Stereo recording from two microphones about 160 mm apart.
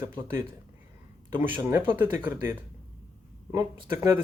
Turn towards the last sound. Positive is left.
turn(degrees=-20)  # may be behind; listen again after turning